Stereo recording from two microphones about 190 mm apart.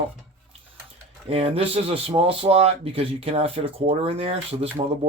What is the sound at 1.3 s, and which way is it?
Speech, 30° right (ahead or behind).